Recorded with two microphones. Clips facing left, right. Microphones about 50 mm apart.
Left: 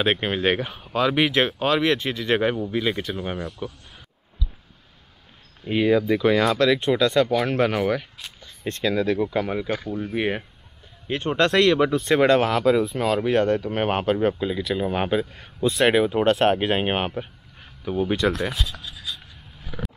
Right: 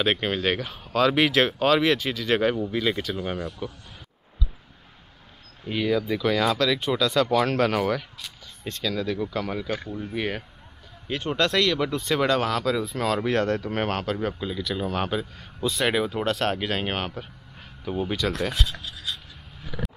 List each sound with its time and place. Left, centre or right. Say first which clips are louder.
0.0 s speech: left 2 dB; centre
0.7 s speech: even; centre
2.5 s speech: left 1 dB; centre
5.7 s speech: left 5 dB; left
7.2 s speech: even; centre
8.8 s speech: left 5 dB; left
15.3 s speech: left 5 dB; left
15.7 s speech: left 6 dB; centre
17.6 s a sound: left 4 dB; centre
18.1 s speech: left 6 dB; left